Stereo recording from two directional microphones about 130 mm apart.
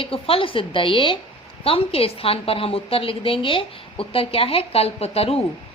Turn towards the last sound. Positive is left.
turn(degrees=50)  # may be behind; listen again after turning